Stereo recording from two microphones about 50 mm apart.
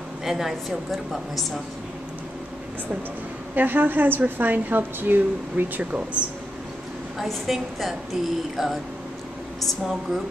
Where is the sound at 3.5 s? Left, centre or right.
Right.